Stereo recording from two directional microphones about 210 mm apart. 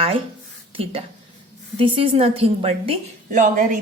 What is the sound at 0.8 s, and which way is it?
A woman's voice, 25° right (ahead or behind).